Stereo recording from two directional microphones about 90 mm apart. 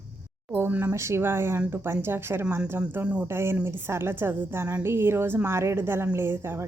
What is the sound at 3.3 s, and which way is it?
A woman's voice, 25° right (ahead or behind).